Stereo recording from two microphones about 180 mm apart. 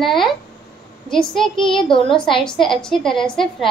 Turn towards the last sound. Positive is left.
turn(degrees=0)  # may be behind; listen again after turning